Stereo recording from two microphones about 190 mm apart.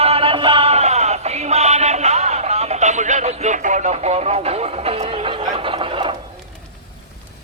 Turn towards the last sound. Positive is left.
turn(degrees=-25)  # may be behind; listen again after turning